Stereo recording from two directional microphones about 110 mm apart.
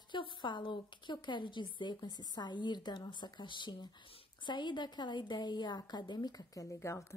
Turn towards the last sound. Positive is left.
turn(degrees=25)  # may be behind; listen again after turning